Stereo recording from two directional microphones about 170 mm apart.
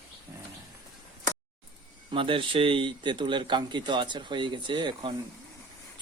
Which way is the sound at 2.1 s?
30° right (ahead or behind).